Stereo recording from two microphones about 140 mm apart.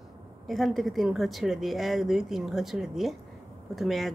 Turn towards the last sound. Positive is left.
turn(degrees=0)  # may be behind; listen again after turning